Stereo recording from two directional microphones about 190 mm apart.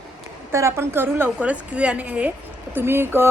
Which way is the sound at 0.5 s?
15° right (ahead or behind).